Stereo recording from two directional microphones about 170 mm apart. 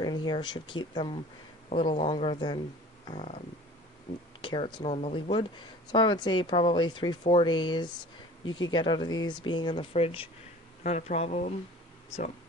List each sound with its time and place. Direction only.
0.0 s speech: 25° left (ahead or behind)
4.4 s speech: 25° left (ahead or behind)
4.9 s speech: 40° left (ahead or behind)
10.8 s speech: 45° left (ahead or behind)